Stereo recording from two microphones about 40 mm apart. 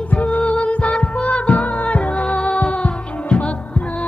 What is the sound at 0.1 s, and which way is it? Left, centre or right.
Music, left.